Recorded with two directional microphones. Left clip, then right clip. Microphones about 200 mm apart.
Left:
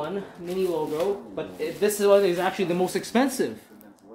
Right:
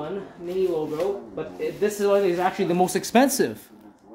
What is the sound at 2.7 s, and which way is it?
Speech, 40° right (ahead or behind).